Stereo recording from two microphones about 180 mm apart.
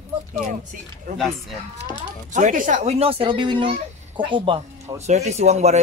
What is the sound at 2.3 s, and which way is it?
Speech, 45° right (ahead or behind).